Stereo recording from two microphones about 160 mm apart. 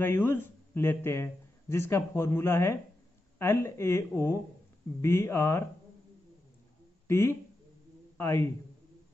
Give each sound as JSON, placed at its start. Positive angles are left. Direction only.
{"t": 0.0, "sound": "speech", "side_deg": 15}
{"t": 7.1, "sound": "speech", "side_deg": 15}